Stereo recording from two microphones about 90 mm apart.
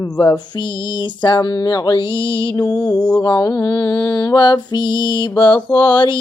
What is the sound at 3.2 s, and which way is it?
Mantra, 45° left (ahead or behind).